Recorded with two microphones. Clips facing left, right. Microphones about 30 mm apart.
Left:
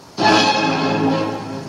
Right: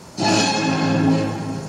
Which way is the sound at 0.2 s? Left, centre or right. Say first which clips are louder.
Left 4 dB; left.